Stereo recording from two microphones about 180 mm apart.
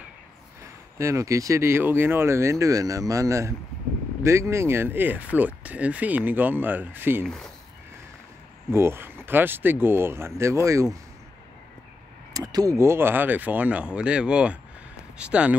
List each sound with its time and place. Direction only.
0.9 s speech: 15° right (ahead or behind)
7.2 s speech: 5° left (ahead or behind)
8.7 s speech: 15° right (ahead or behind)
12.4 s speech: 20° right (ahead or behind)